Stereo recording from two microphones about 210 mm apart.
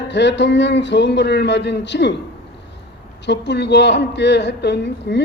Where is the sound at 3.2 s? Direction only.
55° left (ahead or behind).